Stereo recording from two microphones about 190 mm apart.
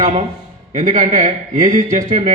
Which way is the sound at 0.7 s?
40° right (ahead or behind).